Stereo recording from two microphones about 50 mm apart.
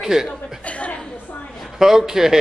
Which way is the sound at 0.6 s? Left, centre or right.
Left.